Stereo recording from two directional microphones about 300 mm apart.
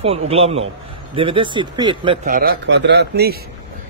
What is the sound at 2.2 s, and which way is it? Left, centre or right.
Speech, right.